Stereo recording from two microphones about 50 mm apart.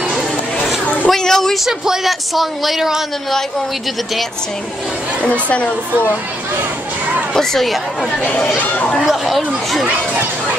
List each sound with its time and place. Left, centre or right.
1.0 s a sound: centre
1.6 s speech: centre
5.5 s speech: left
7.3 s speech: centre
8.2 s speech: left
8.5 s speech: left
9.0 s speech: centre